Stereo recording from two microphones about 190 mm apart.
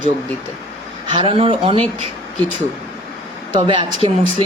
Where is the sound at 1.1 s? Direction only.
25° right (ahead or behind).